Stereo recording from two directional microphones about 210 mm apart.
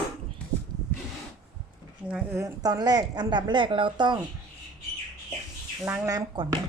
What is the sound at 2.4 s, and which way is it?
Speech, 20° right (ahead or behind).